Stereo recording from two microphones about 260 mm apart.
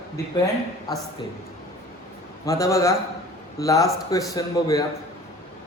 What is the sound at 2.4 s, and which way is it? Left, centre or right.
A man's voice, centre.